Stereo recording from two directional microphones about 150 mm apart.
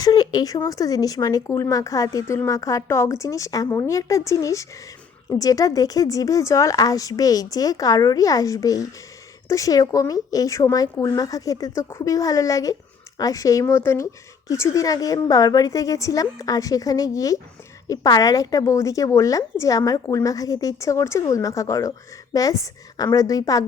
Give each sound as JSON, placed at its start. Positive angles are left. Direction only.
{"t": 0.0, "sound": "a woman's voice", "side_deg": 25}